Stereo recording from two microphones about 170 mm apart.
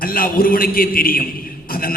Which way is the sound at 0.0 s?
60° left (ahead or behind).